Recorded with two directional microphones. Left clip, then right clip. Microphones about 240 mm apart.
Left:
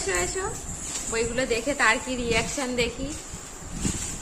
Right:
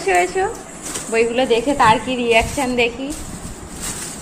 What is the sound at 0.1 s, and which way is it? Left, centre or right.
A woman's voice, centre.